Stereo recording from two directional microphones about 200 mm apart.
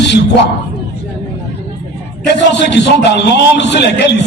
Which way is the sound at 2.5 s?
60° left (ahead or behind).